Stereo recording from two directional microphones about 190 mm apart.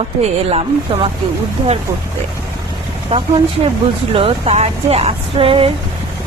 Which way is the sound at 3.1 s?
30° right (ahead or behind).